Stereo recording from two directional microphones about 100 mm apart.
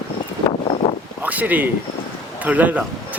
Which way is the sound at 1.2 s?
15° right (ahead or behind).